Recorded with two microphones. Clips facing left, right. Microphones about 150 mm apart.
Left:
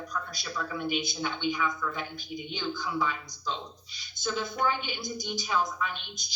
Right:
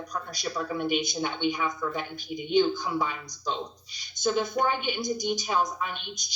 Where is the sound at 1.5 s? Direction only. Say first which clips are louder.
Right 2 dB; 40° right (ahead or behind).